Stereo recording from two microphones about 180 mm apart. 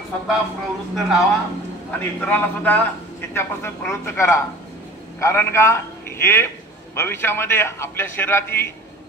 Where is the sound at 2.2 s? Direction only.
10° left (ahead or behind).